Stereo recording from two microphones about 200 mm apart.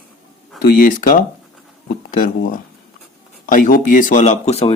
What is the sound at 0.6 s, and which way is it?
Speech, 45° left (ahead or behind).